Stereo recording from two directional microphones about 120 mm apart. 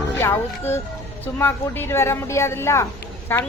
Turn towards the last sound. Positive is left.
turn(degrees=15)  # may be behind; listen again after turning